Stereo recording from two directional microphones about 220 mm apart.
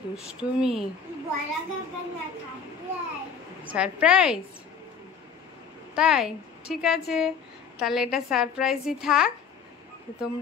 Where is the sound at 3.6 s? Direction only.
5° right (ahead or behind).